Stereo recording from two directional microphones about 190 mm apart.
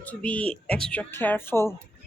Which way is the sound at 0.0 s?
5° left (ahead or behind).